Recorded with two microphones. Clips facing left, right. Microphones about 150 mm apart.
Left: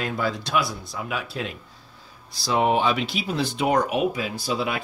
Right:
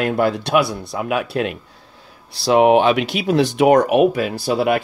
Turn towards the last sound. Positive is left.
turn(degrees=-60)  # may be behind; listen again after turning